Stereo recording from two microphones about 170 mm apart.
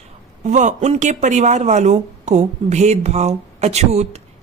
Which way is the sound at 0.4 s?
45° right (ahead or behind).